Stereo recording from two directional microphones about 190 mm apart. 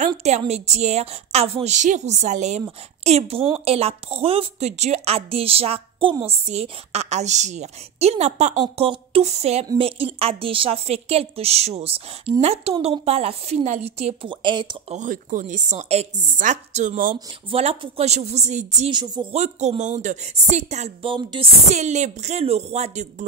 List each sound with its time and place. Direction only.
0.2 s a woman's voice: 35° right (ahead or behind)
15.0 s a woman's voice: 45° right (ahead or behind)
17.5 s a woman's voice: 30° right (ahead or behind)
18.9 s speech: 25° right (ahead or behind)
19.4 s a woman's voice: 35° right (ahead or behind)